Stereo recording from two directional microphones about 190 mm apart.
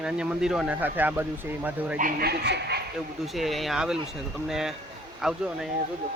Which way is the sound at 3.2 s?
Centre (ahead or behind).